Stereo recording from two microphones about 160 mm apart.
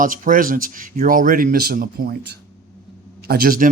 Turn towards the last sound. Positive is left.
turn(degrees=-65)  # may be behind; listen again after turning